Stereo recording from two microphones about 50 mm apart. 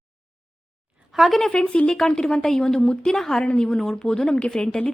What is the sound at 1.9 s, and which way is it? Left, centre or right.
A woman's voice, centre.